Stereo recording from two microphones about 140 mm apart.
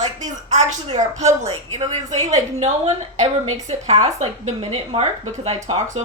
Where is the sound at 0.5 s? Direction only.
55° right (ahead or behind).